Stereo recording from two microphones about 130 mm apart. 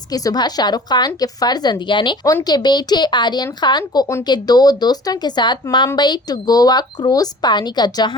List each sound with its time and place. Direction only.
0.1 s a woman's voice: 30° left (ahead or behind)